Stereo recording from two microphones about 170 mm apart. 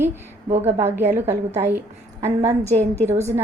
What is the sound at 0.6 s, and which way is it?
A woman's voice, 15° right (ahead or behind).